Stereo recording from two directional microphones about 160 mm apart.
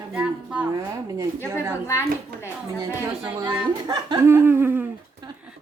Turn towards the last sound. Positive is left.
turn(degrees=-10)  # may be behind; listen again after turning